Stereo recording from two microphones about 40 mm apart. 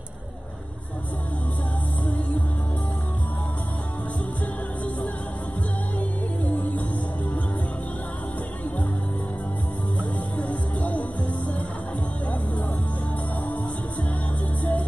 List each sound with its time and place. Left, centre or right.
2.0 s music: left
9.9 s music: left
14.6 s music: left